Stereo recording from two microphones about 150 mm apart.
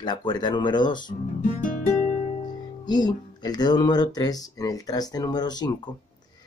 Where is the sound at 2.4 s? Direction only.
30° left (ahead or behind).